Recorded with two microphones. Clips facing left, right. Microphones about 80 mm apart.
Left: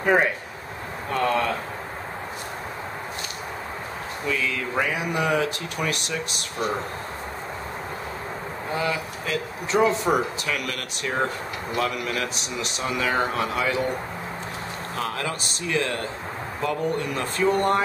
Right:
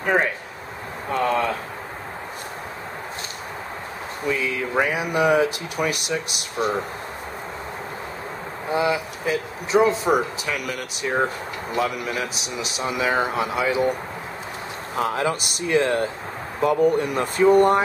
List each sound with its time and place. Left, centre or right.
0.0 s speech: centre
1.1 s a sound: centre
4.3 s speech: centre
8.7 s speech: centre
15.0 s speech: centre